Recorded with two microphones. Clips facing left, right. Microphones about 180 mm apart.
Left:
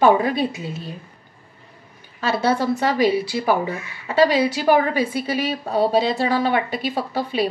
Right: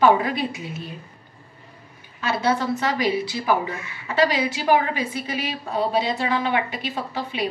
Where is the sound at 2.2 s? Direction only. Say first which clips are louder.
Left 3 dB; 30° left (ahead or behind).